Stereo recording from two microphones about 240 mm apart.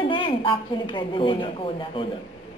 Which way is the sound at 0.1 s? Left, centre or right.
Centre.